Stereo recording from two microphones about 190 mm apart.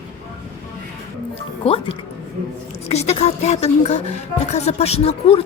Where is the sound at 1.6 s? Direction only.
30° left (ahead or behind).